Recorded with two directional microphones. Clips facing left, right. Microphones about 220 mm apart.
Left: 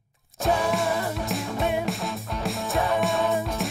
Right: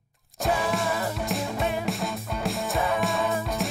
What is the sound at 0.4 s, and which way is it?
Music, centre (ahead or behind).